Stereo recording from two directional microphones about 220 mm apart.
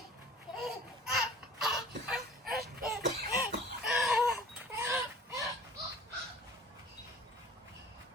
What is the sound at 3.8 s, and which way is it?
Chicken, centre (ahead or behind).